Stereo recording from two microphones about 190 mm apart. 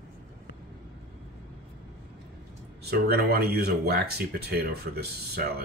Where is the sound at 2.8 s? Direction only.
55° right (ahead or behind).